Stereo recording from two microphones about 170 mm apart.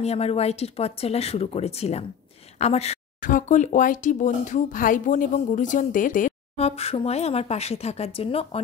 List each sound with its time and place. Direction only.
0.0 s speech: 35° left (ahead or behind)
6.5 s speech: 35° left (ahead or behind)